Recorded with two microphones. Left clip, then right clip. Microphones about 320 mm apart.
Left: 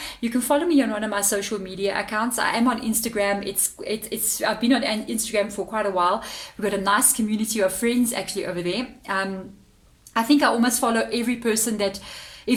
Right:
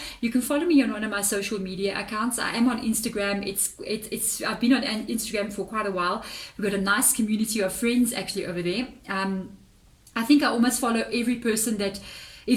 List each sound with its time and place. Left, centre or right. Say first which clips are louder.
0.0 s a woman's voice: left 1 dB; centre